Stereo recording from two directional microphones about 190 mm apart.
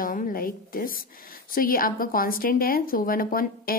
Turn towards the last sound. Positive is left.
turn(degrees=50)  # may be behind; listen again after turning